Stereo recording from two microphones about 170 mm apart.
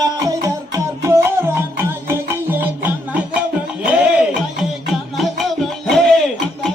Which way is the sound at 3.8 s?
5° right (ahead or behind).